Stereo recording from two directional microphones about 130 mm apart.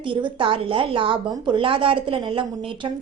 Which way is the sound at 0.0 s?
40° right (ahead or behind).